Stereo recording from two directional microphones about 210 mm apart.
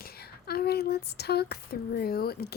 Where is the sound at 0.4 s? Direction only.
50° left (ahead or behind).